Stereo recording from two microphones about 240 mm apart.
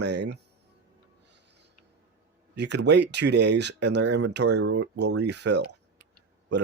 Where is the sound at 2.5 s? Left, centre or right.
Right.